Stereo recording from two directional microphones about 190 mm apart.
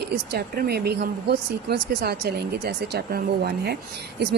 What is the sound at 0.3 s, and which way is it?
Speech, 55° right (ahead or behind).